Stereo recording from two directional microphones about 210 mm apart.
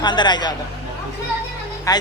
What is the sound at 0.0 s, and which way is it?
Mantra, 20° left (ahead or behind).